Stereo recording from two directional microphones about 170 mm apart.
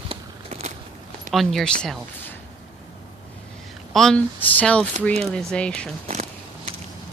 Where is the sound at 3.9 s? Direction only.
5° left (ahead or behind).